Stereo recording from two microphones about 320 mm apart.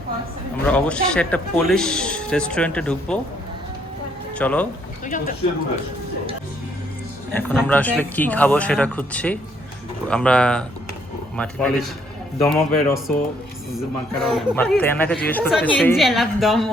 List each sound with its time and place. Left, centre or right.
0.7 s a man's voice: centre
4.4 s speech: centre
5.0 s speech: left
7.3 s a man's voice: centre